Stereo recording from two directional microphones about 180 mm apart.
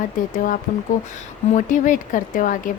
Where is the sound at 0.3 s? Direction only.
45° left (ahead or behind).